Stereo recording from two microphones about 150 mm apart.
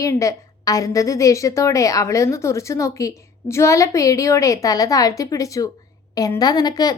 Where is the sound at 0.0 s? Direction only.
20° left (ahead or behind).